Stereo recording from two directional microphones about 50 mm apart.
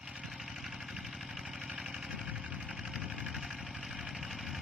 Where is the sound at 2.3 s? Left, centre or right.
Right.